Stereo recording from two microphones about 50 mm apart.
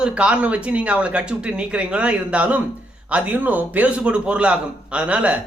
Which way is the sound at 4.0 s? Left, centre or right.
Centre.